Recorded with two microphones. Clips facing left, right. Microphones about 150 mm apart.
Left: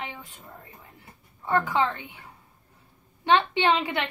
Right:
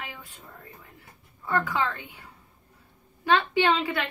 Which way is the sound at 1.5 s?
25° left (ahead or behind).